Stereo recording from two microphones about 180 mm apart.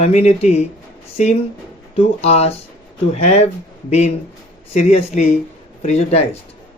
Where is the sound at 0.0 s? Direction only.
35° left (ahead or behind).